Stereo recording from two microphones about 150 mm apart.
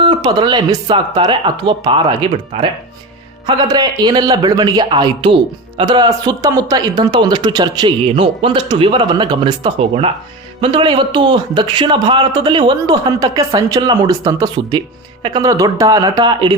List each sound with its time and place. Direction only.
0.0 s a man's voice: 35° right (ahead or behind)